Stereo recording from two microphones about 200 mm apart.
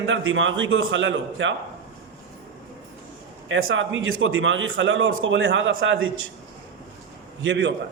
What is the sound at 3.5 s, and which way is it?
A man's voice, 80° right.